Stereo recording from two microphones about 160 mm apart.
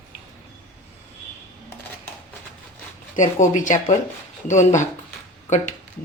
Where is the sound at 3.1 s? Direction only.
50° left (ahead or behind).